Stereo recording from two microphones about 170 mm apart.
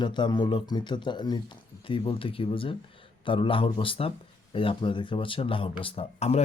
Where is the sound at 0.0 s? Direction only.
25° left (ahead or behind).